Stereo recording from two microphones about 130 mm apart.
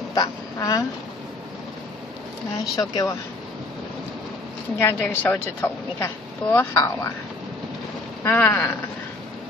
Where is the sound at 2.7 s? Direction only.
25° left (ahead or behind).